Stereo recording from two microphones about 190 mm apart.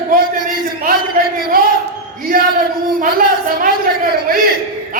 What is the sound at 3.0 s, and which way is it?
Speech, 50° right (ahead or behind).